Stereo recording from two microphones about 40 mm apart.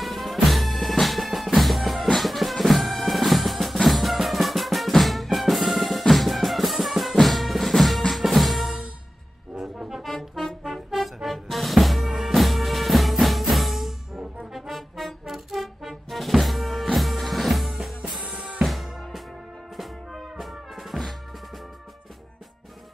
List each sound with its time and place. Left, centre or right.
0.0 s music: centre
9.6 s brass instrument: centre
10.0 s brass instrument: centre
10.6 s music: centre
14.4 s trombone: centre
15.2 s music: centre
18.2 s drum: right
18.6 s music: centre